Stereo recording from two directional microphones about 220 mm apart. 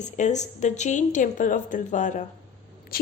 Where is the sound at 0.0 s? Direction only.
35° left (ahead or behind).